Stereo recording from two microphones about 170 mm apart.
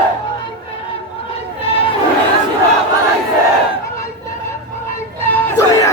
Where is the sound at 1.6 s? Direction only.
35° left (ahead or behind).